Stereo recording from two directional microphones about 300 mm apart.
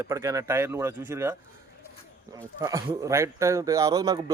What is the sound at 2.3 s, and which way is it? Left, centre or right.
Speech, centre.